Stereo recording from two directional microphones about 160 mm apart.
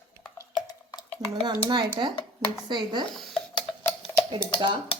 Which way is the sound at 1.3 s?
30° right (ahead or behind).